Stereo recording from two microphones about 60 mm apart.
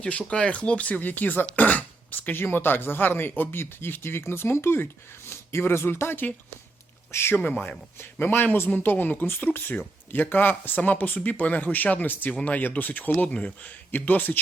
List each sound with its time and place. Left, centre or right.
0.0 s speech: left
7.3 s speech: left
8.2 s speech: left